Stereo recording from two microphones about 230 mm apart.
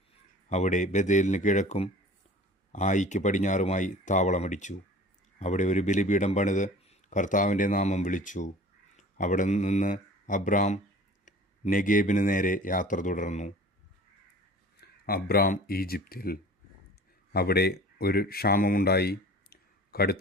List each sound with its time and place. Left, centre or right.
0.5 s speech: left
14.8 s speech: left